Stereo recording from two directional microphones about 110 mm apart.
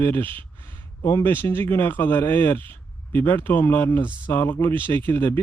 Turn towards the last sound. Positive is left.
turn(degrees=20)  # may be behind; listen again after turning